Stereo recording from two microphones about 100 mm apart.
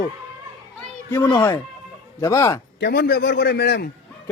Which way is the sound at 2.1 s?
30° left (ahead or behind).